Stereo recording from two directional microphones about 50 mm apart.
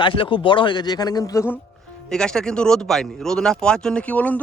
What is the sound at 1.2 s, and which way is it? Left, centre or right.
Speech, left.